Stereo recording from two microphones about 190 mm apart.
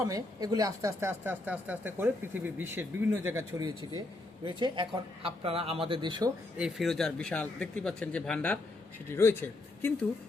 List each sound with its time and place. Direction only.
0.1 s speech: 20° right (ahead or behind)
6.6 s a man's voice: centre (ahead or behind)